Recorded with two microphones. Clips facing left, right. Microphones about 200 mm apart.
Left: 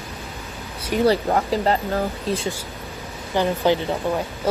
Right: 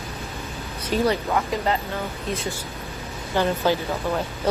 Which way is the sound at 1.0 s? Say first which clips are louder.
Left 5 dB; 35° left (ahead or behind).